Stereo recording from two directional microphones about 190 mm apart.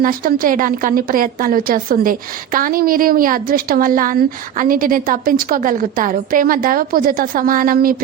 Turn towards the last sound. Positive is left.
turn(degrees=-50)  # may be behind; listen again after turning